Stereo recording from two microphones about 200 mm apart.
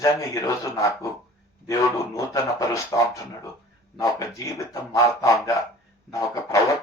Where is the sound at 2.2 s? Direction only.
15° left (ahead or behind).